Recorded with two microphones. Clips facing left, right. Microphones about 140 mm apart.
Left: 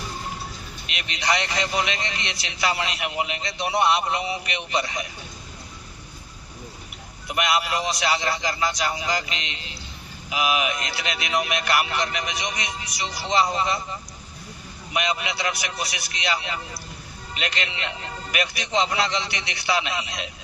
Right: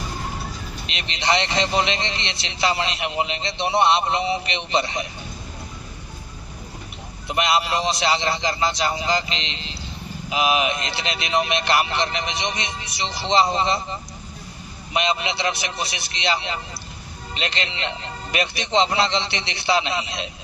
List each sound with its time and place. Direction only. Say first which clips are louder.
0.9 s a man's voice: right 3 dB; 25° right (ahead or behind)
7.3 s a man's voice: right 3 dB; 25° right (ahead or behind)